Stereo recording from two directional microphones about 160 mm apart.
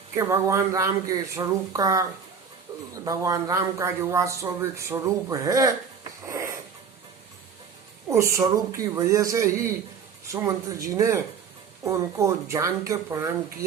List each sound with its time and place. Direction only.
0.1 s speech: 15° right (ahead or behind)
6.2 s a sound: 20° right (ahead or behind)
8.1 s speech: 20° right (ahead or behind)